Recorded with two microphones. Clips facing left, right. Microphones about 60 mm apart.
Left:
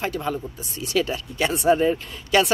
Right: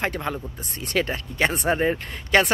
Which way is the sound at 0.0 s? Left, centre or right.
Right.